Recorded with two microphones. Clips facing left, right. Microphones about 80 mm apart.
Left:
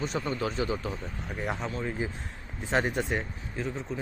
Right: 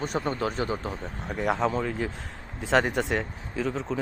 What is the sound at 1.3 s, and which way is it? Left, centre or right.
Speech, right.